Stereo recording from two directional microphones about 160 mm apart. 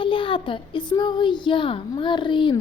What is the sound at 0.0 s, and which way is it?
A child's voice, 30° left (ahead or behind).